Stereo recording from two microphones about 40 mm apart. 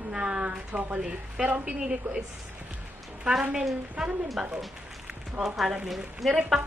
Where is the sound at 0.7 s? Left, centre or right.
Right.